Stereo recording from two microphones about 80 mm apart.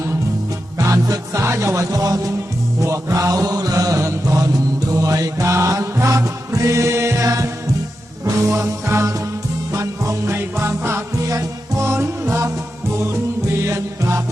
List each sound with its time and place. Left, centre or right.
0.8 s music: right
2.8 s mantra: right
4.9 s music: right
13.6 s music: right